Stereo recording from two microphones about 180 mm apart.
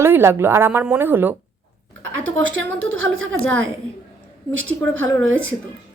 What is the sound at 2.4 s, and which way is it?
A woman's voice, 90° right.